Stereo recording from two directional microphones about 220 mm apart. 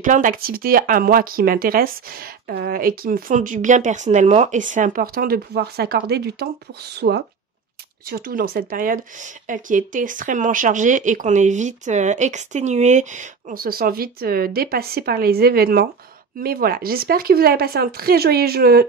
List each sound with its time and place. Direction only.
0.0 s a woman's voice: 35° right (ahead or behind)